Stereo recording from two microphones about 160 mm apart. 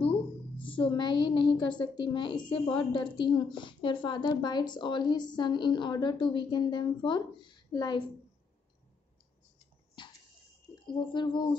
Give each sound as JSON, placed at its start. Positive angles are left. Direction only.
{"t": 0.7, "sound": "a woman's voice", "side_deg": 30}
{"t": 10.0, "sound": "a sound", "side_deg": 30}
{"t": 10.7, "sound": "speech", "side_deg": 30}